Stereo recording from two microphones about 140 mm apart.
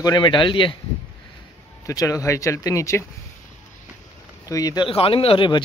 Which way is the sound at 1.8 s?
25° left (ahead or behind).